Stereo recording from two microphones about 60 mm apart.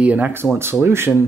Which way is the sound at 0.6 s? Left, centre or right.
Right.